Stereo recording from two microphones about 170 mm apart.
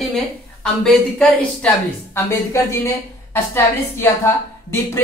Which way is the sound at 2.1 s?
15° left (ahead or behind).